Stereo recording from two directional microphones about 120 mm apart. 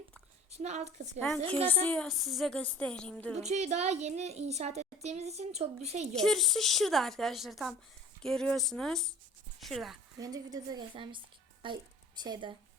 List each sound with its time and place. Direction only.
0.5 s a child's voice: 65° right (ahead or behind)
1.4 s a woman's voice: 55° right (ahead or behind)
1.6 s a woman's voice: 15° left (ahead or behind)
2.0 s a woman's voice: centre (ahead or behind)
2.6 s a woman's voice: 10° left (ahead or behind)
3.3 s a child's voice: 70° right (ahead or behind)
6.1 s a woman's voice: 5° left (ahead or behind)
10.2 s a woman's voice: 30° right (ahead or behind)